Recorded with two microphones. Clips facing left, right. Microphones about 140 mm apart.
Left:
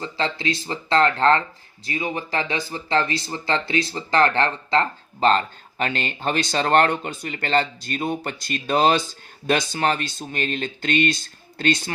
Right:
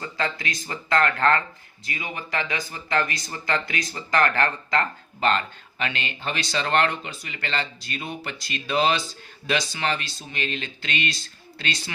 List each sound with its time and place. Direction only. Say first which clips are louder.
0.0 s speech: left 3 dB; 30° left (ahead or behind); by 11.8 s 45° left (ahead or behind)